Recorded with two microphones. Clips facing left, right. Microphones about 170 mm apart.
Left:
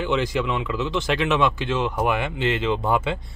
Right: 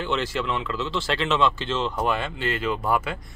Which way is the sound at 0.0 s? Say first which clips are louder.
Left 3 dB; 15° left (ahead or behind).